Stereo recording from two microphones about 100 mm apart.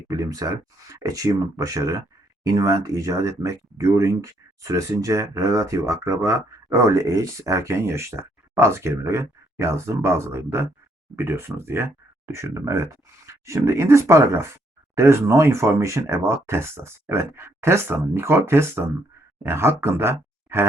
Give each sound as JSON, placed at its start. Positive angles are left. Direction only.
{"t": 0.2, "sound": "speech", "side_deg": -35}